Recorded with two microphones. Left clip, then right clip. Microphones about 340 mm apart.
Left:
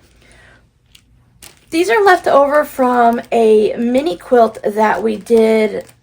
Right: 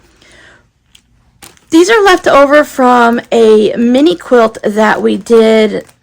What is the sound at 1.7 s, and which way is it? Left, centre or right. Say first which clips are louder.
Speech: right 5 dB; right.